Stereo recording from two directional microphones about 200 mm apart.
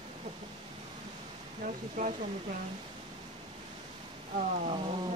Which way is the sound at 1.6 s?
40° right (ahead or behind).